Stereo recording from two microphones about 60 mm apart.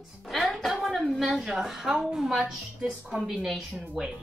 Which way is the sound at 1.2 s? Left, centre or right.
Centre.